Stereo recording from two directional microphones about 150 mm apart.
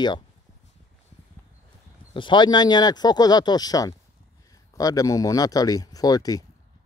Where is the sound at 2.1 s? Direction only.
30° left (ahead or behind).